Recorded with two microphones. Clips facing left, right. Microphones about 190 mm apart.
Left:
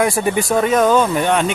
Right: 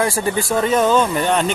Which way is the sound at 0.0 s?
15° left (ahead or behind).